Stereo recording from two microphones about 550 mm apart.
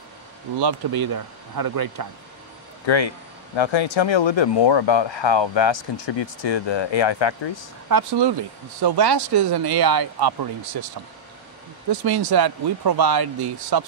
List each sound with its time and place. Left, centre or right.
0.6 s speech: right
3.5 s speech: left
7.9 s speech: right
11.9 s speech: right